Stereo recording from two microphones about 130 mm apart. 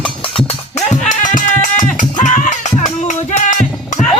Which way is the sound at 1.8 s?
70° left (ahead or behind).